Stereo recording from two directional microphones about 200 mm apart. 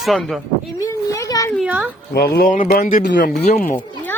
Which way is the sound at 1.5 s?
5° right (ahead or behind).